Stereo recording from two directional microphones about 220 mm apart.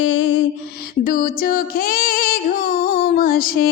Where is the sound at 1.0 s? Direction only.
40° left (ahead or behind).